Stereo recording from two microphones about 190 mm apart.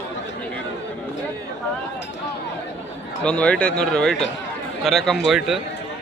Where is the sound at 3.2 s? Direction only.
5° left (ahead or behind).